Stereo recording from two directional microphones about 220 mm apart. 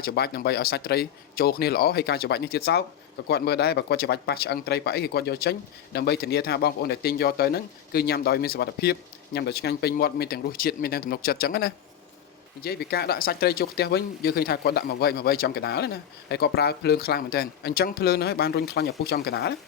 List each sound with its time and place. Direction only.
0.0 s speech: 45° left (ahead or behind)